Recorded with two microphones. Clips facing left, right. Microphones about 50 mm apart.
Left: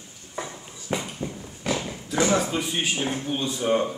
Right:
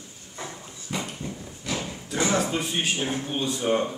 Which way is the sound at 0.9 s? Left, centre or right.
Left.